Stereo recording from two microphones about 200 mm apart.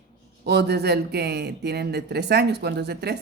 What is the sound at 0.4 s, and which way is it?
Speech, 55° right (ahead or behind).